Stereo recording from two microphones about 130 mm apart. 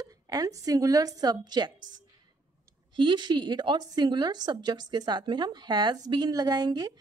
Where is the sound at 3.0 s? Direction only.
35° right (ahead or behind).